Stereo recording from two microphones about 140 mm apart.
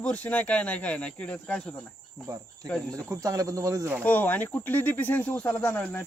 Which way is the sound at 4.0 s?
10° left (ahead or behind).